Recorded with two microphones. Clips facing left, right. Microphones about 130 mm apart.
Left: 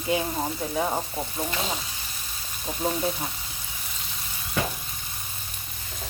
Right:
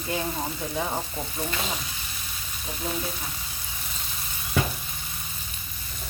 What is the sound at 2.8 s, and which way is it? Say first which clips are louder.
Speech: left 4 dB; 35° left (ahead or behind).